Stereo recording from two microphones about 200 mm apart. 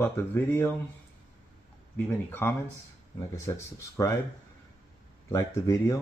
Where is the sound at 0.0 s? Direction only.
10° left (ahead or behind).